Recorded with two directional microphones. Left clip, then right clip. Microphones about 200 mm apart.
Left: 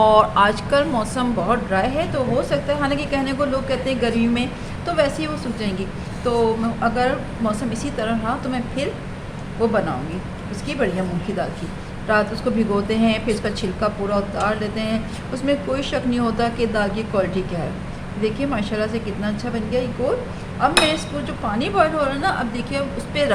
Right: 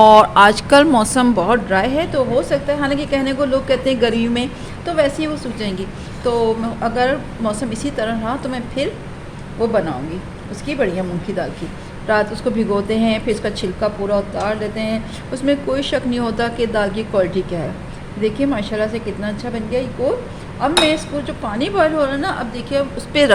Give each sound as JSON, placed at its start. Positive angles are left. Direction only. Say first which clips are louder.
{"t": 0.0, "sound": "a woman's voice", "louder": "right 6 dB", "side_deg": -40}
{"t": 2.3, "sound": "a woman's voice", "louder": "right 3 dB", "side_deg": -25}
{"t": 12.1, "sound": "a woman's voice", "louder": "right 2 dB", "side_deg": -30}
{"t": 23.1, "sound": "a woman's voice", "louder": "right 6 dB", "side_deg": -45}